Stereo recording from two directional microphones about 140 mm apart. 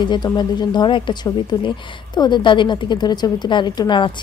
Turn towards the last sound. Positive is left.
turn(degrees=30)  # may be behind; listen again after turning